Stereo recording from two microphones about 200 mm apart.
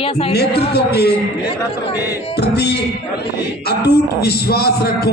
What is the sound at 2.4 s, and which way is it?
Music, 55° left (ahead or behind).